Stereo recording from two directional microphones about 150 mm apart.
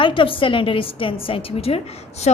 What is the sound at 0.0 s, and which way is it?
A woman's voice, 35° left (ahead or behind).